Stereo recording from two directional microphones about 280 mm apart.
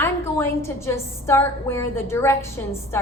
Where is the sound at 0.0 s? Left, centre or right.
Centre.